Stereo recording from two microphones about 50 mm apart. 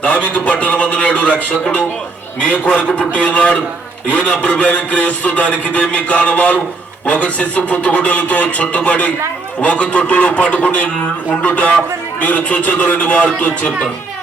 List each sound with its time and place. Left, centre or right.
0.0 s speech: left
2.4 s speech: left